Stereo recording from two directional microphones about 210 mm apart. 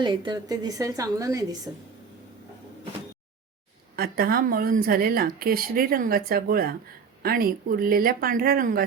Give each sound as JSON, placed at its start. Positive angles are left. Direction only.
{"t": 0.0, "sound": "a woman's voice", "side_deg": -20}
{"t": 3.9, "sound": "speech", "side_deg": -45}